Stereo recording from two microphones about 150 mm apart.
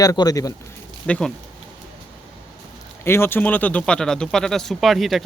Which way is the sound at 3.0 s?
15° left (ahead or behind).